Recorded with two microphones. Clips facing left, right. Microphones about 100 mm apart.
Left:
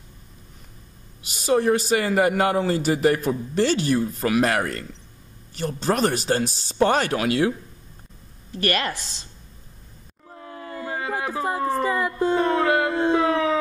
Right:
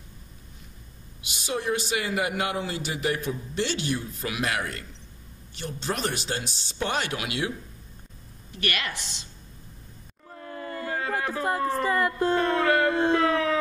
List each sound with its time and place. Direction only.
1.2 s a man's voice: 40° left (ahead or behind)
8.5 s a woman's voice: 35° left (ahead or behind)
10.3 s a sound: 15° left (ahead or behind)